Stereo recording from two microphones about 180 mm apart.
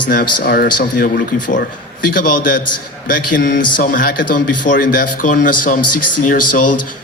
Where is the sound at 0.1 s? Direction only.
55° left (ahead or behind).